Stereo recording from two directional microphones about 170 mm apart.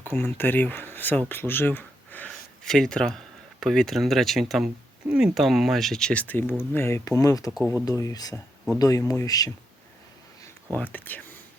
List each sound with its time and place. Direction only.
0.0 s speech: 10° left (ahead or behind)
10.8 s speech: 10° left (ahead or behind)